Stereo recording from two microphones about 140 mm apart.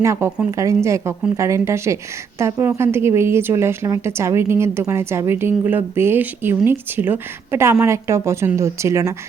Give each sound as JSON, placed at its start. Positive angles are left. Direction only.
{"t": 0.0, "sound": "a woman's voice", "side_deg": -20}